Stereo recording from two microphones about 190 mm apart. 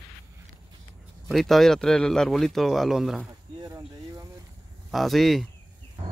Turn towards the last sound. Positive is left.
turn(degrees=0)  # may be behind; listen again after turning